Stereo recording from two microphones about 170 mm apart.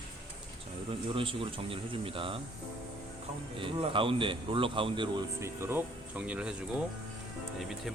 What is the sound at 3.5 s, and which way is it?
Speech, 30° right (ahead or behind).